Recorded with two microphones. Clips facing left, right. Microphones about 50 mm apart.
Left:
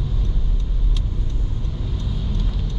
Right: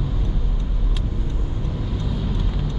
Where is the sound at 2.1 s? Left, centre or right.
Centre.